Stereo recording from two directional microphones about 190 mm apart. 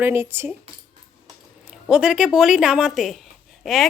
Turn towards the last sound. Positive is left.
turn(degrees=0)  # may be behind; listen again after turning